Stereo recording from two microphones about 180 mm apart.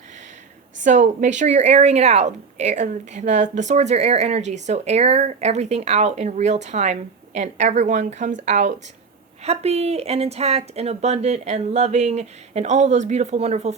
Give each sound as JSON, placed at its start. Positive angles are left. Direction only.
{"t": 0.9, "sound": "speech", "side_deg": -40}